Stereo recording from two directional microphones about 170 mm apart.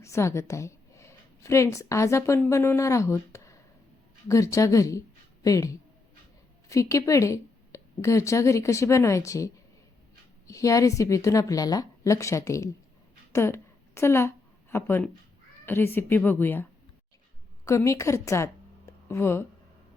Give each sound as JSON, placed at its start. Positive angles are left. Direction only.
{"t": 0.0, "sound": "a woman's voice", "side_deg": 15}
{"t": 17.7, "sound": "speech", "side_deg": 15}